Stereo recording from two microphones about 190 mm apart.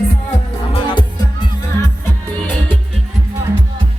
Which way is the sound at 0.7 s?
25° left (ahead or behind).